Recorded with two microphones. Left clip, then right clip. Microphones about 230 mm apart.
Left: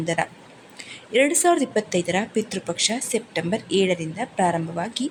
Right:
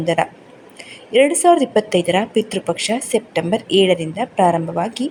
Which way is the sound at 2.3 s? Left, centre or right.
Left.